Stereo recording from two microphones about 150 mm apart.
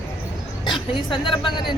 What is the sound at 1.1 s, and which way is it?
Speech, 35° left (ahead or behind).